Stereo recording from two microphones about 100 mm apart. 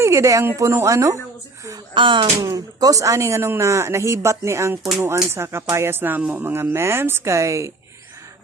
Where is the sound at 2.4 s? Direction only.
35° right (ahead or behind).